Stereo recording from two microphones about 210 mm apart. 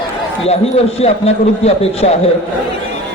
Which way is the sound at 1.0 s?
30° left (ahead or behind).